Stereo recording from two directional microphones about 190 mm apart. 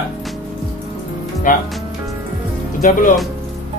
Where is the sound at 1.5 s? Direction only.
45° left (ahead or behind).